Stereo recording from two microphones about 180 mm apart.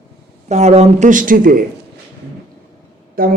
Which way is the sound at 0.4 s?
40° right (ahead or behind).